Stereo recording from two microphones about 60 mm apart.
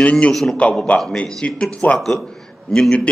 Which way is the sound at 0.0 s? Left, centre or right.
Centre.